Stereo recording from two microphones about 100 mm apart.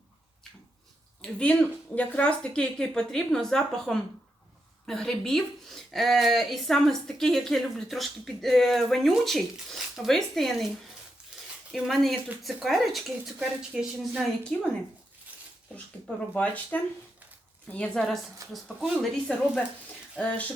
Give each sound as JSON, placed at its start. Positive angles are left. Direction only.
{"t": 1.2, "sound": "speech", "side_deg": 10}
{"t": 11.3, "sound": "a sound", "side_deg": -10}
{"t": 11.7, "sound": "speech", "side_deg": 0}
{"t": 15.7, "sound": "speech", "side_deg": 10}
{"t": 18.4, "sound": "speech", "side_deg": -35}
{"t": 19.3, "sound": "speech", "side_deg": 10}